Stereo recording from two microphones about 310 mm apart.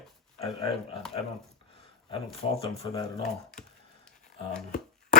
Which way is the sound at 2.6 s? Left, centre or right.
Centre.